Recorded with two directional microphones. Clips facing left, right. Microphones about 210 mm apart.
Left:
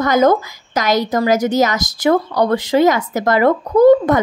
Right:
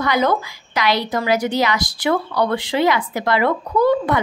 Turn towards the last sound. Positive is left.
turn(degrees=45)  # may be behind; listen again after turning